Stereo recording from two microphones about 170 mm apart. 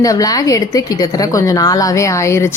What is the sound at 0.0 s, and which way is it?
A woman's voice, 20° left (ahead or behind).